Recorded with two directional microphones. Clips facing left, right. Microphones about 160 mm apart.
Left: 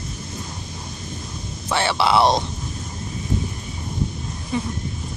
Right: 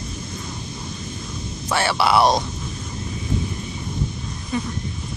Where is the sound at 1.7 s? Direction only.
25° left (ahead or behind).